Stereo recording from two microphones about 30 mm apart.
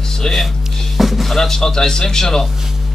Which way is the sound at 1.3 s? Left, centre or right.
Centre.